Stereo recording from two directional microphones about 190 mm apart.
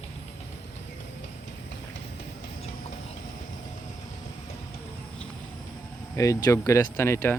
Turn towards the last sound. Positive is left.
turn(degrees=15)  # may be behind; listen again after turning